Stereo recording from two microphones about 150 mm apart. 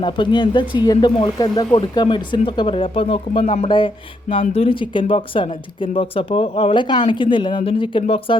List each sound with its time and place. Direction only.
0.0 s speech: 30° left (ahead or behind)
3.4 s speech: 50° left (ahead or behind)
3.7 s speech: 30° left (ahead or behind)